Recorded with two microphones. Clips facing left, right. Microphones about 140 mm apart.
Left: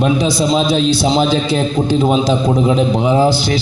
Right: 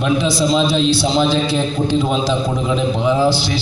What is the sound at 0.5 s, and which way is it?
A man's voice, 45° left (ahead or behind).